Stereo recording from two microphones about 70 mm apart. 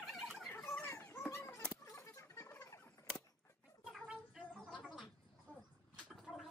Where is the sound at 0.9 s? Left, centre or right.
Left.